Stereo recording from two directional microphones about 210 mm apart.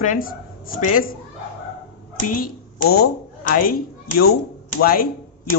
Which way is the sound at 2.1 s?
40° left (ahead or behind).